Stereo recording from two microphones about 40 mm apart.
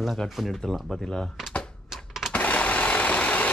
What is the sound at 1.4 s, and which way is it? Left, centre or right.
Typewriter, centre.